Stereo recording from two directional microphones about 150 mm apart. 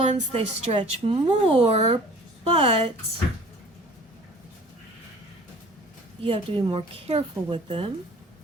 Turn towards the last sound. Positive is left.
turn(degrees=-35)  # may be behind; listen again after turning